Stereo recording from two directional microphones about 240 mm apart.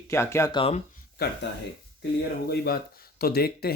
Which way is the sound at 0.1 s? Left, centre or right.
Centre.